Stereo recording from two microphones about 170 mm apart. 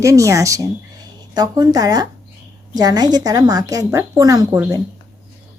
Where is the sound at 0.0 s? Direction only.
20° right (ahead or behind).